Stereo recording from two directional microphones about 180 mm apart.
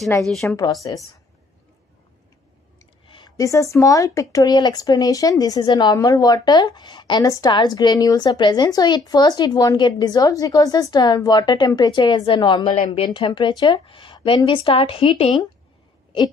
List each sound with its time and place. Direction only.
0.2 s a woman's voice: centre (ahead or behind)
0.8 s speech: 25° left (ahead or behind)
3.1 s speech: 20° left (ahead or behind)
12.7 s speech: 35° left (ahead or behind)